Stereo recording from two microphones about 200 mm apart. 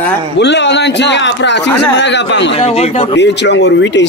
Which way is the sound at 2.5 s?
30° left (ahead or behind).